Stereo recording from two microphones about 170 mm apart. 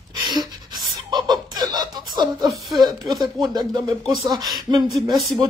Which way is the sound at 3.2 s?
25° right (ahead or behind).